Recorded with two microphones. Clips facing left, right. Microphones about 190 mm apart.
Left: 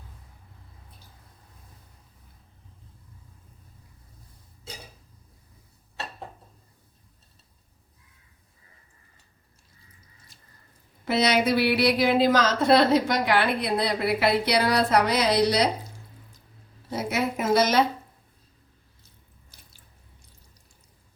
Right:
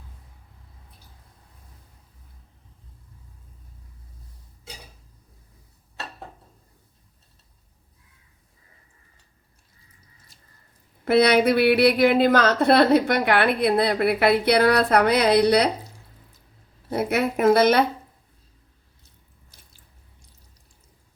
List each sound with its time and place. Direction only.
11.0 s speech: 55° right (ahead or behind)
16.9 s speech: 60° right (ahead or behind)